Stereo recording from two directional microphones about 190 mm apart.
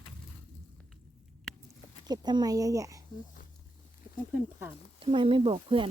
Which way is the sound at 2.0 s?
20° right (ahead or behind).